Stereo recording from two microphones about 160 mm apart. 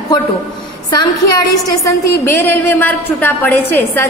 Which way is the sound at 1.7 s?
20° left (ahead or behind).